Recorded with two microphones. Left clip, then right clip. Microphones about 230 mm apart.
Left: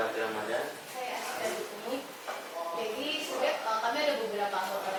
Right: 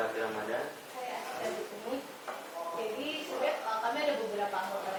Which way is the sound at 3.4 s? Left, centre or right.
Centre.